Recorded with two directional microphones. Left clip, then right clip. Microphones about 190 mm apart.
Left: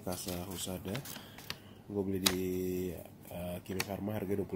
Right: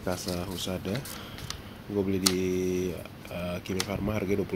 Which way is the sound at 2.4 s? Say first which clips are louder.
Right 7 dB; 15° left (ahead or behind).